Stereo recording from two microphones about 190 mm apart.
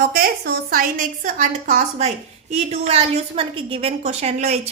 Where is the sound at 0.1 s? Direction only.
55° right (ahead or behind).